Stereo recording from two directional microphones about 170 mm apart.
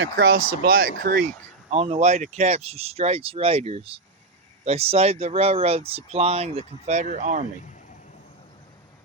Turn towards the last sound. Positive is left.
turn(degrees=-45)  # may be behind; listen again after turning